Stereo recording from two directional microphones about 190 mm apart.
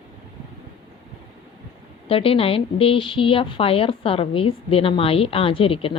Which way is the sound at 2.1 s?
30° left (ahead or behind).